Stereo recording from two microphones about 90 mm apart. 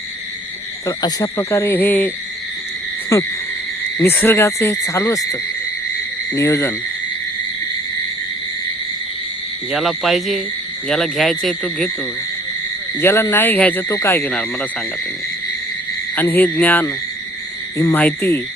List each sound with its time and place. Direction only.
0.9 s speech: 40° left (ahead or behind); by 2.1 s 20° left (ahead or behind)
4.0 s speech: 25° left (ahead or behind)
6.3 s speech: 30° left (ahead or behind)
9.7 s speech: centre (ahead or behind)
13.0 s speech: 25° left (ahead or behind)
13.8 s speech: 40° left (ahead or behind)
14.1 s speech: 25° left (ahead or behind)
16.1 s speech: 25° left (ahead or behind)
17.9 s speech: 20° left (ahead or behind)